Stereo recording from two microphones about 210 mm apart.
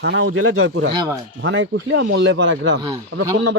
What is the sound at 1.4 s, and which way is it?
Speech, 60° right (ahead or behind).